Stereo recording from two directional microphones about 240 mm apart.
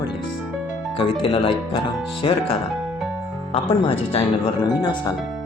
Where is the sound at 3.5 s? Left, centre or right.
Left.